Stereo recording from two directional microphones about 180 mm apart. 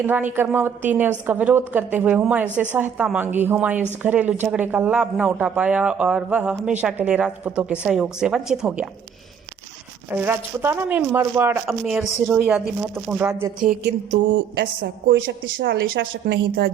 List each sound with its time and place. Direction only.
0.0 s a woman's voice: 10° right (ahead or behind)
10.1 s a woman's voice: 10° right (ahead or behind)
14.6 s a woman's voice: 50° right (ahead or behind); by 16.7 s 75° right (ahead or behind)